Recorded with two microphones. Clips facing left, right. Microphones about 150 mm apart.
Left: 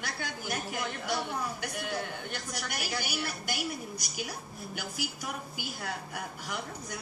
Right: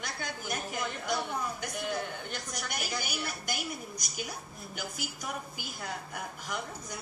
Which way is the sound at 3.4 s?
45° right (ahead or behind).